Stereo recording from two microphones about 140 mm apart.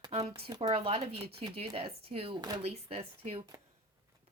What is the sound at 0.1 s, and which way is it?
Speech, 50° right (ahead or behind).